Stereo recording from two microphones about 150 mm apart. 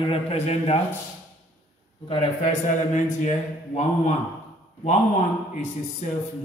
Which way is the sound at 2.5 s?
55° left (ahead or behind).